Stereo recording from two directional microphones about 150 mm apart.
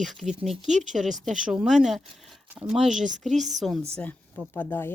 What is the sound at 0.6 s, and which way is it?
Speech, 55° right (ahead or behind).